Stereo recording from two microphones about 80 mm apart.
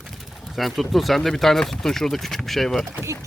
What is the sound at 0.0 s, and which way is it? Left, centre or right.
Speech, centre.